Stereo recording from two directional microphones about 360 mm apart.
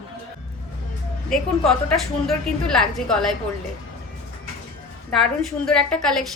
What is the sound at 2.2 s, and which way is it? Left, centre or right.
A woman's voice, centre.